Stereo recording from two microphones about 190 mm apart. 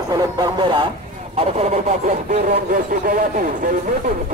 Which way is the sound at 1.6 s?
40° right (ahead or behind).